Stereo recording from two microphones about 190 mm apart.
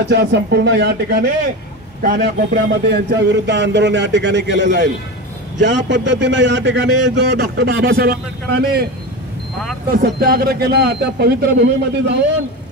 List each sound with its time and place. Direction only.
0.0 s a man's voice: 60° right (ahead or behind)
9.8 s a man's voice: 55° right (ahead or behind)